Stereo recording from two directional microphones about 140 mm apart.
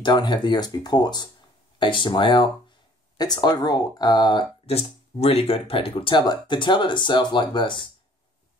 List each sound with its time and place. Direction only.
0.0 s speech: 35° left (ahead or behind)
4.6 s speech: 45° left (ahead or behind)